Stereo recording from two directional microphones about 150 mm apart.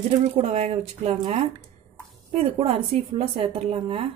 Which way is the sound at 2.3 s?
45° right (ahead or behind).